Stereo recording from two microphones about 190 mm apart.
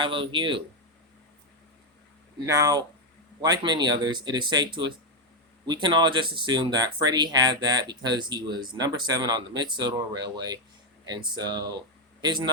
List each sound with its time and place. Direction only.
0.0 s speech: 25° right (ahead or behind)
2.5 s speech: 20° right (ahead or behind)